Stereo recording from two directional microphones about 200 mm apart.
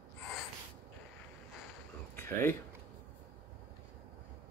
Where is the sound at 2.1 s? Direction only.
10° left (ahead or behind).